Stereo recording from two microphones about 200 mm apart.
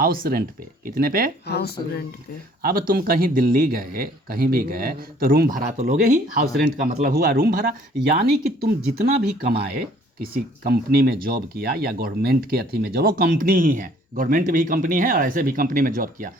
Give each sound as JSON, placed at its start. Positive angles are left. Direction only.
{"t": 0.0, "sound": "speech", "side_deg": -45}
{"t": 1.5, "sound": "speech", "side_deg": 55}
{"t": 2.6, "sound": "speech", "side_deg": -45}